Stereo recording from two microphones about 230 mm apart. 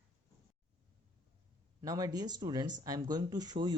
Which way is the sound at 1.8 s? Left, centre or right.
Centre.